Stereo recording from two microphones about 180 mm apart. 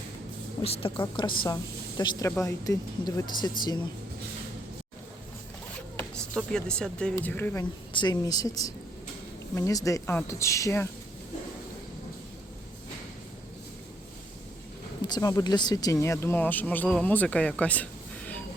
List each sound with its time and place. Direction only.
0.6 s a woman's voice: 30° left (ahead or behind)
6.0 s speech: 5° left (ahead or behind)
7.9 s speech: 20° left (ahead or behind)
15.0 s speech: 20° left (ahead or behind)